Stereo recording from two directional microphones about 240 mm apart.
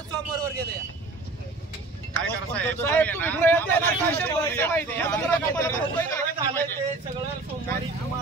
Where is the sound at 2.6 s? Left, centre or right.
Centre.